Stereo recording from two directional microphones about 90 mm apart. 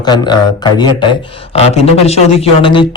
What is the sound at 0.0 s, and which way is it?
Speech, 50° left (ahead or behind).